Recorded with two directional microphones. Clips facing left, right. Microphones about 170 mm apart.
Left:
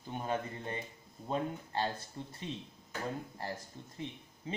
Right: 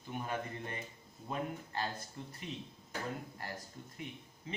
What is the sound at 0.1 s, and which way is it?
Speech, 30° left (ahead or behind).